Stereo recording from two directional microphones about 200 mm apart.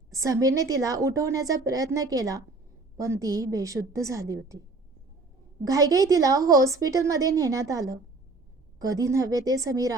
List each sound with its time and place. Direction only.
0.1 s a woman's voice: 15° right (ahead or behind)
5.6 s a woman's voice: 15° right (ahead or behind)